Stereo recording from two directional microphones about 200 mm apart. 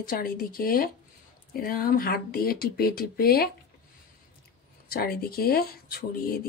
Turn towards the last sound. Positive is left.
turn(degrees=50)  # may be behind; listen again after turning